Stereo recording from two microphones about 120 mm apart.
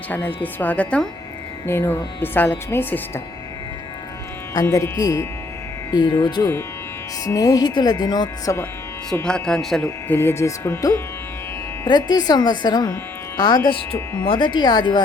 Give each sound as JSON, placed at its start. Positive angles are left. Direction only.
{"t": 0.1, "sound": "a woman's voice", "side_deg": 15}
{"t": 4.6, "sound": "speech", "side_deg": 25}
{"t": 9.2, "sound": "speech", "side_deg": 5}
{"t": 9.8, "sound": "speech", "side_deg": 20}
{"t": 11.9, "sound": "speech", "side_deg": 35}